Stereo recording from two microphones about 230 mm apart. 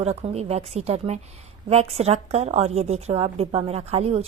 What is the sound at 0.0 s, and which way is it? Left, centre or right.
Speech, right.